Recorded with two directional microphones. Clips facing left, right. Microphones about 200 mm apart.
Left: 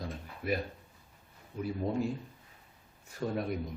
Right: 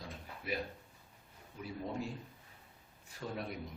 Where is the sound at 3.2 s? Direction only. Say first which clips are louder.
Left 8 dB; 55° left (ahead or behind).